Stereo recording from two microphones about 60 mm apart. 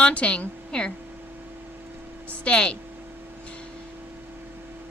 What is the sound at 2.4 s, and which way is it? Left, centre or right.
Speech, centre.